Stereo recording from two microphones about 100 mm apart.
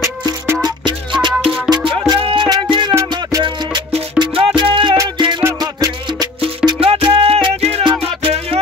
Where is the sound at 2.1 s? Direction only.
60° right (ahead or behind).